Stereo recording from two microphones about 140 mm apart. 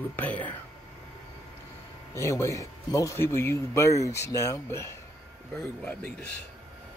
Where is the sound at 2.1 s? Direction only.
20° left (ahead or behind).